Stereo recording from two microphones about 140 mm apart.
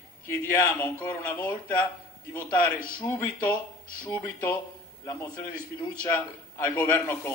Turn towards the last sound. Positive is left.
turn(degrees=15)  # may be behind; listen again after turning